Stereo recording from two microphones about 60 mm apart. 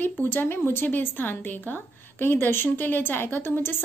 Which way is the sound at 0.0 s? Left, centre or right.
Left.